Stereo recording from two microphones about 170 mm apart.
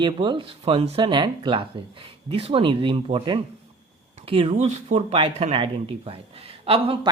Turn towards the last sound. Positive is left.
turn(degrees=-35)  # may be behind; listen again after turning